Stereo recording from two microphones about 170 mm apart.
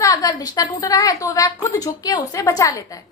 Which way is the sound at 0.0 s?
20° left (ahead or behind).